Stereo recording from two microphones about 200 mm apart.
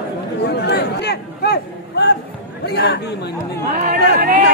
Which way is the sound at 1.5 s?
55° left (ahead or behind).